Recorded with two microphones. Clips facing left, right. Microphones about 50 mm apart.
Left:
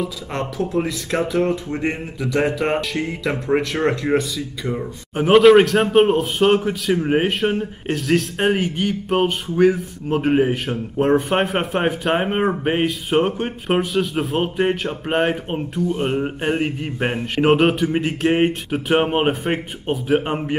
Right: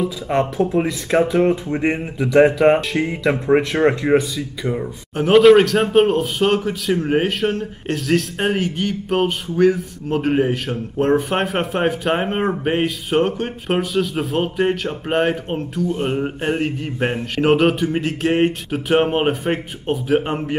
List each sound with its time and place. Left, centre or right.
0.3 s speech: right
1.1 s speech: centre
1.4 s speech: centre
2.6 s speech: centre
5.3 s speech: centre